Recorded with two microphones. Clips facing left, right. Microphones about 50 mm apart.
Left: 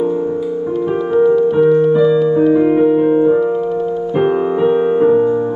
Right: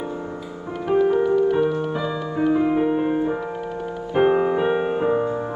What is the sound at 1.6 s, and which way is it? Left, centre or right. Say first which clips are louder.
Music: left 11 dB; left.